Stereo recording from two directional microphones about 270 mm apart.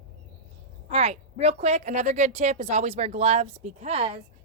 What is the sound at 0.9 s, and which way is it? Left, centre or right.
A woman's voice, right.